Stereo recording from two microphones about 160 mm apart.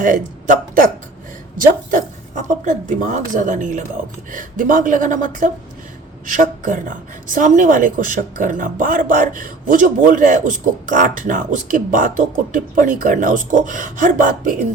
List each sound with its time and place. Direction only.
0.0 s a woman's voice: 55° right (ahead or behind)